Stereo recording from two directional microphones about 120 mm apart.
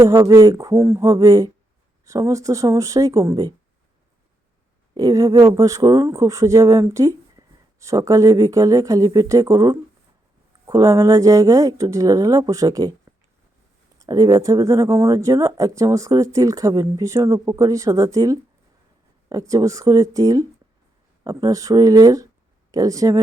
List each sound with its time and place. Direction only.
0.0 s speech: 30° right (ahead or behind)
4.9 s speech: 30° right (ahead or behind)